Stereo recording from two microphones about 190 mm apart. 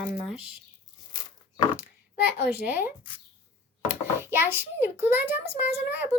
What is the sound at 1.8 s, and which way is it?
Speech, 10° right (ahead or behind).